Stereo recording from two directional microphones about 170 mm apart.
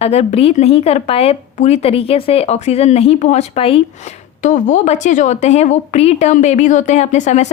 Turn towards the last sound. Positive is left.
turn(degrees=45)  # may be behind; listen again after turning